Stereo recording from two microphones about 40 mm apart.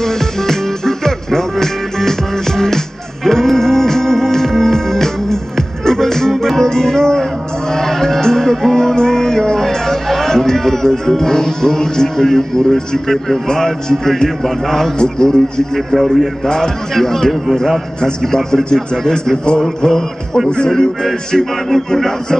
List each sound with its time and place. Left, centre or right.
0.0 s music: centre
20.4 s speech: centre
21.0 s music: centre